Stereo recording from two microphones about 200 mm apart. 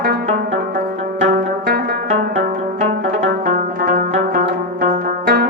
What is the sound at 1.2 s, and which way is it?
Music, 50° right (ahead or behind).